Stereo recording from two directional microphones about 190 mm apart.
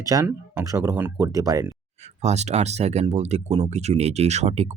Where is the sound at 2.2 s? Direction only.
35° right (ahead or behind).